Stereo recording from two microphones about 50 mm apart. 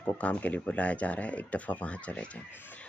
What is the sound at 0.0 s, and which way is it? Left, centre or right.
Speech, left.